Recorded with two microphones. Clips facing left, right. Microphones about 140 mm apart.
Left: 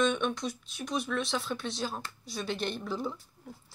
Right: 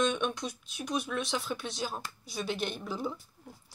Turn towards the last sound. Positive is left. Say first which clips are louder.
# left 1 dB
turn(degrees=-5)  # may be behind; listen again after turning